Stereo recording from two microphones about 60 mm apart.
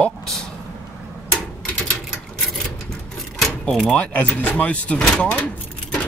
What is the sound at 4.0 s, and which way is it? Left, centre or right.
Speech, left.